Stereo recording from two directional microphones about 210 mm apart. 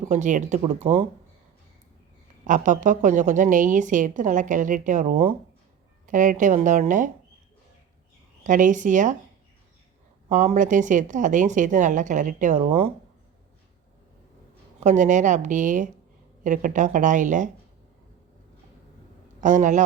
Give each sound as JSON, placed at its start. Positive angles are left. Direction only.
{"t": 0.1, "sound": "a woman's voice", "side_deg": -35}
{"t": 2.5, "sound": "a woman's voice", "side_deg": -35}
{"t": 8.4, "sound": "a woman's voice", "side_deg": -35}
{"t": 10.2, "sound": "a woman's voice", "side_deg": -40}
{"t": 14.8, "sound": "a woman's voice", "side_deg": -35}
{"t": 19.4, "sound": "a woman's voice", "side_deg": -35}